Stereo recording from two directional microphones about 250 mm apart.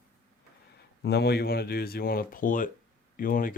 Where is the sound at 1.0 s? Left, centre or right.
Left.